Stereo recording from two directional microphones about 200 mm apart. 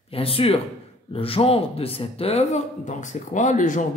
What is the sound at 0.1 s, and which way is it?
Speech, 30° left (ahead or behind).